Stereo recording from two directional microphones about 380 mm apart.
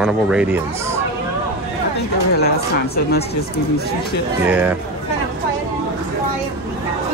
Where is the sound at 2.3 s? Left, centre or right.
Left.